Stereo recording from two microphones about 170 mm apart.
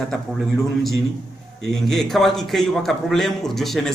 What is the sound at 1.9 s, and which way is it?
A man's voice, centre (ahead or behind).